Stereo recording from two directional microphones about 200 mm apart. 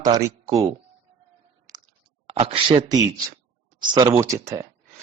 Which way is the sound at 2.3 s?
30° right (ahead or behind).